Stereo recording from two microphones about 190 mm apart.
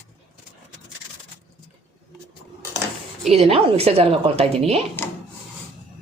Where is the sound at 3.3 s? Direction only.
30° right (ahead or behind).